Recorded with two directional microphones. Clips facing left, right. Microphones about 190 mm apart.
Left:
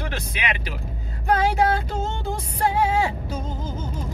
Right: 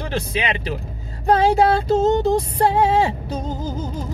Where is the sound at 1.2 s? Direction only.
30° right (ahead or behind).